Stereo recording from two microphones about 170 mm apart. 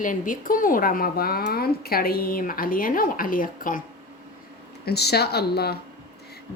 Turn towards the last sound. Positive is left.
turn(degrees=70)  # may be behind; listen again after turning